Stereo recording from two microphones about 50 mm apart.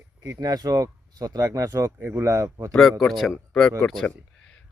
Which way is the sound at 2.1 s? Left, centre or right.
Right.